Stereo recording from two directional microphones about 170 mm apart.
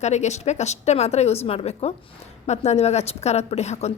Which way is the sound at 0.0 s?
40° left (ahead or behind).